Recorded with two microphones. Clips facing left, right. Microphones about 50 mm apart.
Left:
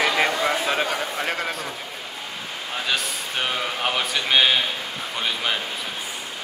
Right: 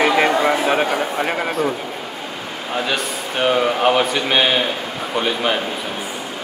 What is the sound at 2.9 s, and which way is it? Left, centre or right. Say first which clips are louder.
Speech: right 4 dB; centre.